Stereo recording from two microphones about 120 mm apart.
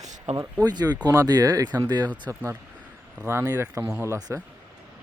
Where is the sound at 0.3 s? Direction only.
75° right (ahead or behind).